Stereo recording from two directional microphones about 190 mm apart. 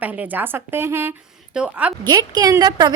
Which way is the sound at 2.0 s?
20° right (ahead or behind).